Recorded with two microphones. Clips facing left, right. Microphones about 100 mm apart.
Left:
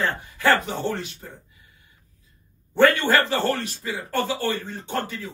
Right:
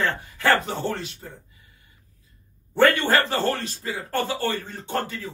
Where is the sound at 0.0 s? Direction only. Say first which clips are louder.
Left 1 dB; 20° left (ahead or behind).